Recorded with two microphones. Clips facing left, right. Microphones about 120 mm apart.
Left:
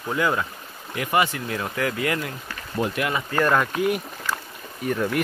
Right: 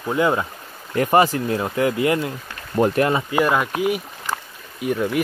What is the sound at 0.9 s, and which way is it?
Speech, 40° right (ahead or behind).